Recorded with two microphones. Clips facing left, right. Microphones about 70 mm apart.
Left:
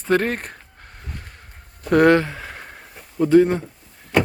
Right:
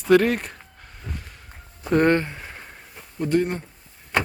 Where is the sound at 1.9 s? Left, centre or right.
Left.